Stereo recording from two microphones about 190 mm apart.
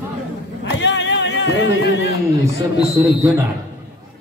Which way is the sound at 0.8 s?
70° left (ahead or behind).